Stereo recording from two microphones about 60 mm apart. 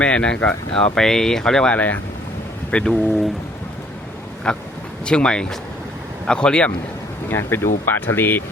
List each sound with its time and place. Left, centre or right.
0.0 s speech: centre
1.7 s speech: left
2.7 s speech: centre
4.4 s speech: centre
7.3 s speech: left